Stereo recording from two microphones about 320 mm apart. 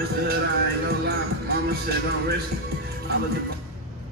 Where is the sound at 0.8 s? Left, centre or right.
Right.